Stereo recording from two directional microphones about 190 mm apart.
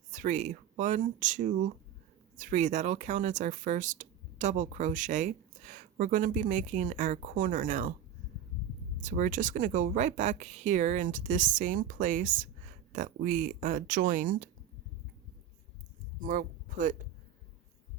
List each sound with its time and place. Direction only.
0.1 s speech: 40° right (ahead or behind)
9.0 s speech: 45° right (ahead or behind)
16.2 s speech: 45° right (ahead or behind)